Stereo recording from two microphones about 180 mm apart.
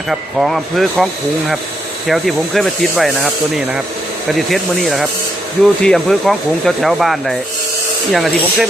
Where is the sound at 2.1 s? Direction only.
Centre (ahead or behind).